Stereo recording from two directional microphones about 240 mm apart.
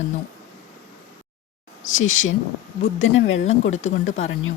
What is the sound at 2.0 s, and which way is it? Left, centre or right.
Speech, left.